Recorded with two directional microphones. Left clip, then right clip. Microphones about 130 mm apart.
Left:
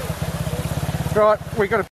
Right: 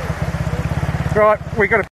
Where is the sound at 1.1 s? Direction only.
15° left (ahead or behind).